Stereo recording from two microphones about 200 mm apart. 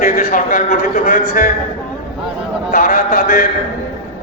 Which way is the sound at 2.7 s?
45° left (ahead or behind).